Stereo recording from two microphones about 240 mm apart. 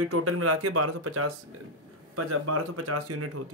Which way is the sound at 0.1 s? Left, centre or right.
Right.